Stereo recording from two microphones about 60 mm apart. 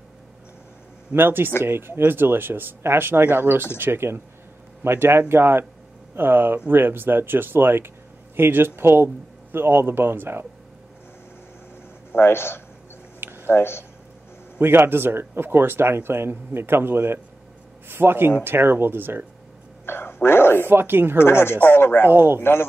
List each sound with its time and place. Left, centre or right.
1.1 s speech: right
12.1 s a man's voice: left
13.2 s a sound: right
13.5 s speech: left
14.6 s speech: right
19.9 s speech: left
20.6 s speech: right
21.2 s speech: left
22.1 s speech: right
22.4 s speech: left